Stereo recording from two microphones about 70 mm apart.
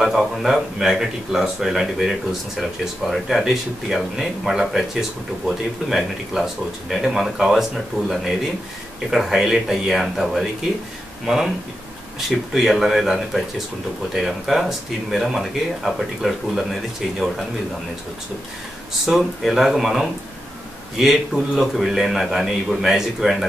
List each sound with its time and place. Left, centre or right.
0.0 s speech: centre
5.9 s speech: centre
19.0 s speech: centre